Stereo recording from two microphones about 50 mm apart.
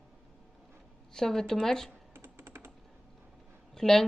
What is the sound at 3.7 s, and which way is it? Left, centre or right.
Speech, centre.